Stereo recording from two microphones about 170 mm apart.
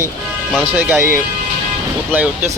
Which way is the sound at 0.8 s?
10° right (ahead or behind).